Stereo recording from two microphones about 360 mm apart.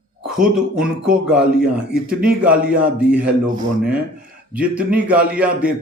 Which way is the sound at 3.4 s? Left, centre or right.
Right.